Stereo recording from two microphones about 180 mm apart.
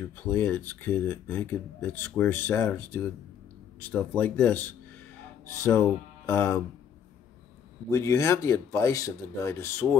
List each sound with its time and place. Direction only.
0.0 s speech: 10° left (ahead or behind)
7.9 s speech: 15° left (ahead or behind)